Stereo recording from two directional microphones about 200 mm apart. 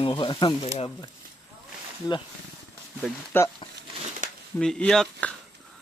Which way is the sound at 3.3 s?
10° left (ahead or behind).